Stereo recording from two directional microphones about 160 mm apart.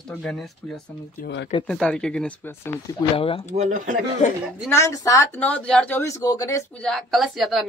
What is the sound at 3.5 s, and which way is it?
Speech, 50° right (ahead or behind).